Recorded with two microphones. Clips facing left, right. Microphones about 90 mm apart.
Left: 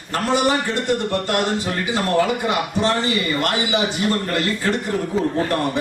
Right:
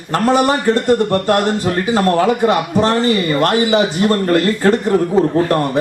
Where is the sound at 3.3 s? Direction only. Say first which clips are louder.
Right 7 dB; 45° right (ahead or behind).